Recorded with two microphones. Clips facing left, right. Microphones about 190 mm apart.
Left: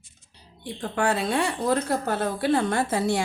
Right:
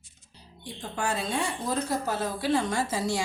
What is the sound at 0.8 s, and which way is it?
A woman's voice, 65° left (ahead or behind).